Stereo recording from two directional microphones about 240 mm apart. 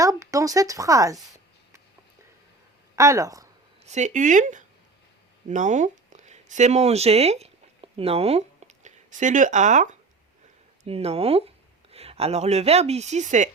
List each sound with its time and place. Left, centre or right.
0.0 s speech: centre
2.9 s speech: centre
3.8 s speech: right